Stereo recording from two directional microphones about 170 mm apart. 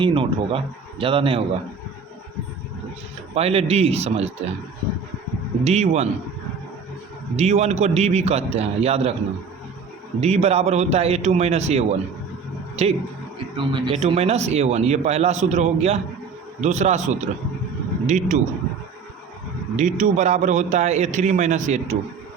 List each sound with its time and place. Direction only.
0.0 s speech: 30° right (ahead or behind)
3.3 s speech: 35° right (ahead or behind)
5.6 s speech: 40° right (ahead or behind)
7.3 s speech: 40° right (ahead or behind)
10.2 s a man's voice: 40° right (ahead or behind)
19.7 s a man's voice: 45° right (ahead or behind)